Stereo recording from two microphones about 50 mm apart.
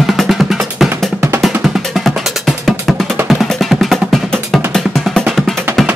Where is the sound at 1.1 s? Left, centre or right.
Right.